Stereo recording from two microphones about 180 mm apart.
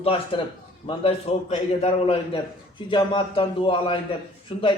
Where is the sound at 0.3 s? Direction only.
30° left (ahead or behind).